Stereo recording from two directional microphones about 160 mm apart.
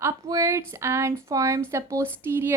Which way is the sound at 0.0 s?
20° right (ahead or behind).